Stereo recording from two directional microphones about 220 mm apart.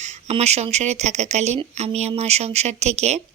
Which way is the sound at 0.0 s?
30° right (ahead or behind).